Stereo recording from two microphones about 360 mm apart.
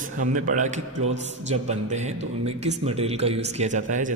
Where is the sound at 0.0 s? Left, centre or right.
Right.